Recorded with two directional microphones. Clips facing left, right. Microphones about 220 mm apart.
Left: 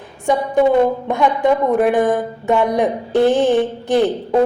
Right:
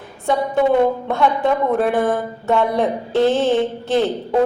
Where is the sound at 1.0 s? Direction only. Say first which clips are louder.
Left 2 dB; 15° left (ahead or behind).